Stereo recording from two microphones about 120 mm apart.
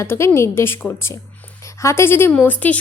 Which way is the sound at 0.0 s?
20° left (ahead or behind).